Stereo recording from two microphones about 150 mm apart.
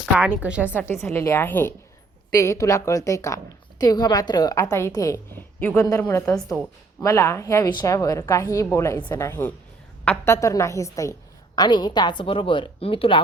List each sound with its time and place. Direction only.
0.0 s a woman's voice: 5° right (ahead or behind)
0.7 s a woman's voice: 15° left (ahead or behind)
10.3 s a woman's voice: 20° left (ahead or behind); by 13.2 s 35° left (ahead or behind)